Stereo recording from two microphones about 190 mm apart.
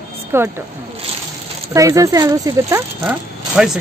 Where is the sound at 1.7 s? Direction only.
15° right (ahead or behind).